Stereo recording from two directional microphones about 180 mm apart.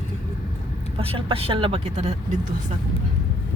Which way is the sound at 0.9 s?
30° right (ahead or behind).